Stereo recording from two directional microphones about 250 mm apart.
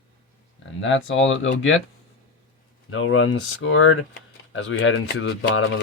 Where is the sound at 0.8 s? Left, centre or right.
Left.